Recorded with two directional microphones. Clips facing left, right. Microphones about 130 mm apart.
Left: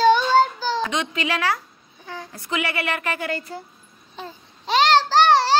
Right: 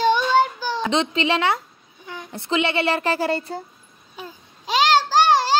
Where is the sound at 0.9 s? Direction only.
30° right (ahead or behind).